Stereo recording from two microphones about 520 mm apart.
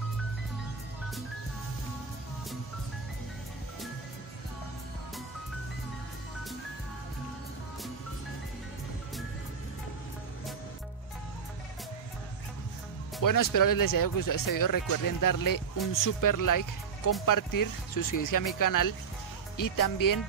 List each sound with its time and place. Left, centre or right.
13.2 s speech: left